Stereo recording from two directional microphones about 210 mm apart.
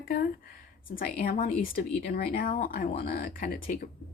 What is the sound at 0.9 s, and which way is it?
A woman's voice, 45° left (ahead or behind).